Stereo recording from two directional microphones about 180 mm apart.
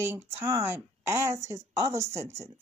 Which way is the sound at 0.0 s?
10° right (ahead or behind).